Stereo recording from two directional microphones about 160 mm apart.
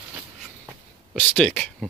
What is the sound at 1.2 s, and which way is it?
Speech, 5° left (ahead or behind).